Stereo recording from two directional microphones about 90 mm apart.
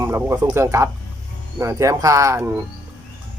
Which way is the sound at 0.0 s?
30° right (ahead or behind).